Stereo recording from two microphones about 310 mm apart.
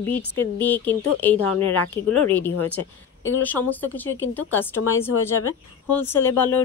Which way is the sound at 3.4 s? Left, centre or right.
Centre.